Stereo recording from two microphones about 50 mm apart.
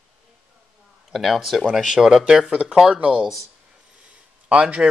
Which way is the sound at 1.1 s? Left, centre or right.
Centre.